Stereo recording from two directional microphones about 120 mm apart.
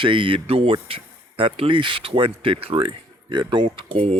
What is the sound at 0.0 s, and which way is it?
Speech, 45° right (ahead or behind).